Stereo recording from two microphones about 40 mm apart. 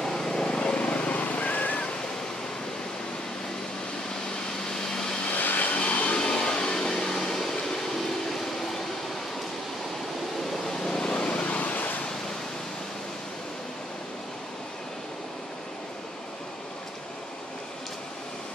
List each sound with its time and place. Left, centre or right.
0.0 s vehicle: centre
0.6 s vehicle: left
5.3 s vehicle: left
5.8 s vacuum cleaner: left
6.5 s a sound: left
7.3 s vehicle: centre
10.4 s a sound: centre
10.9 s vehicle: left